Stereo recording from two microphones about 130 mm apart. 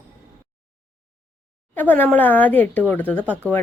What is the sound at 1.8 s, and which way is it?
Speech, 15° left (ahead or behind).